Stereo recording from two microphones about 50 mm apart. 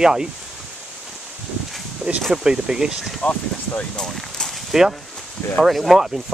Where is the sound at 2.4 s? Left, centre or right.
Centre.